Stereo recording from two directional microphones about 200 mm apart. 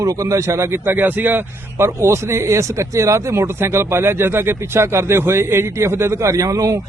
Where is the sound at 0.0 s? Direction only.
15° right (ahead or behind).